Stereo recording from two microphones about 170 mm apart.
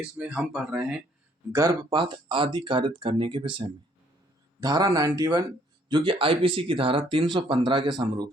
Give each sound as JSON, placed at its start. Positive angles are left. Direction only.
{"t": 0.0, "sound": "speech", "side_deg": -5}
{"t": 1.5, "sound": "speech", "side_deg": -20}